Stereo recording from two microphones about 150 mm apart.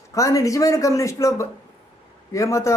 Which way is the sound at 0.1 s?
20° left (ahead or behind).